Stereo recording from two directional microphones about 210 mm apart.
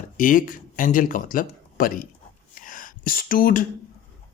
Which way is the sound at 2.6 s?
40° left (ahead or behind).